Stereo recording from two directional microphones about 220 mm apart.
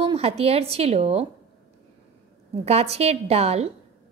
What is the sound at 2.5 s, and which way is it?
A woman's voice, 30° right (ahead or behind).